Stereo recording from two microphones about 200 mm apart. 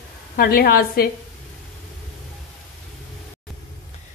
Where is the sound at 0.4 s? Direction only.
50° left (ahead or behind).